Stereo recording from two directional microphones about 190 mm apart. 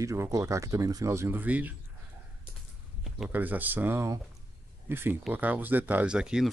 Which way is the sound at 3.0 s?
5° right (ahead or behind).